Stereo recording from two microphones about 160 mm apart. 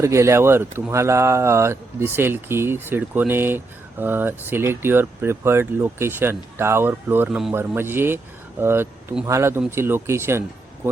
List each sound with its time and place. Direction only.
0.0 s speech: 15° right (ahead or behind)